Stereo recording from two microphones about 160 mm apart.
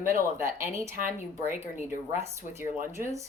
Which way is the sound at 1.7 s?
45° left (ahead or behind).